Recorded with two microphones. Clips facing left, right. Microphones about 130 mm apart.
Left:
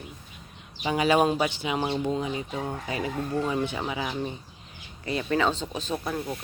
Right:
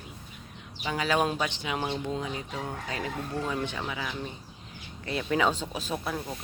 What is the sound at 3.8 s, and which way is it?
Speech, 25° left (ahead or behind).